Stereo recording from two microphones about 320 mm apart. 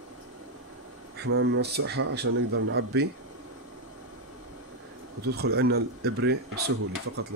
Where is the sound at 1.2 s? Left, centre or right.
Right.